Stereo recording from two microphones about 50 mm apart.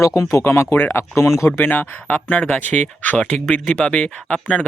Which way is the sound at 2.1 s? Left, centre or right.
Left.